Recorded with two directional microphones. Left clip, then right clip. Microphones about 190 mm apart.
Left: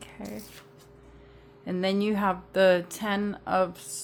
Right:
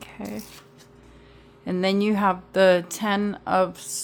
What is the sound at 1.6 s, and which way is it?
A woman's voice, 20° right (ahead or behind).